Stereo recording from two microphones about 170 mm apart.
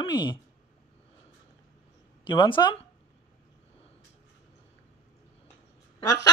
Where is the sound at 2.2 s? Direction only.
30° left (ahead or behind).